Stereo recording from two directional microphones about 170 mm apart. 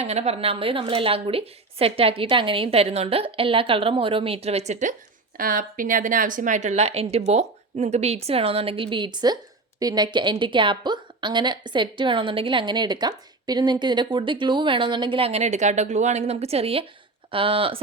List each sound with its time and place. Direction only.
0.0 s a woman's voice: 40° right (ahead or behind)
5.4 s a woman's voice: 55° right (ahead or behind); by 17.7 s 30° right (ahead or behind)